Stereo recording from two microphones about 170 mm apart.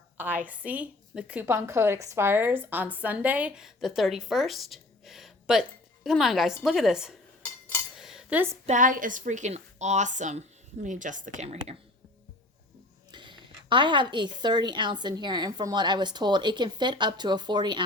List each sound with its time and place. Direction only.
0.2 s a woman's voice: 10° right (ahead or behind)
7.9 s cutlery: centre (ahead or behind)
8.6 s a woman's voice: 50° right (ahead or behind)
13.1 s a woman's voice: 25° right (ahead or behind)